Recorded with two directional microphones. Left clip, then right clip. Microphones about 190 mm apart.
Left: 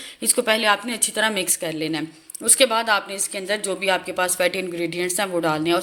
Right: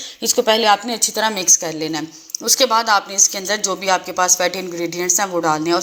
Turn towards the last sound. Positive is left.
turn(degrees=30)  # may be behind; listen again after turning